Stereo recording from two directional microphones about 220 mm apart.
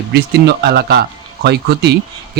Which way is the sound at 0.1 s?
50° right (ahead or behind).